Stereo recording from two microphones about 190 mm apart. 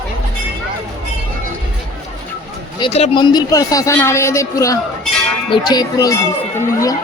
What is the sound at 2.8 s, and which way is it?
A man's voice, 35° left (ahead or behind).